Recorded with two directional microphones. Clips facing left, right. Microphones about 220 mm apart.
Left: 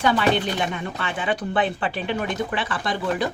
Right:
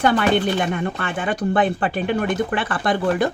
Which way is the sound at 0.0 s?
50° right (ahead or behind).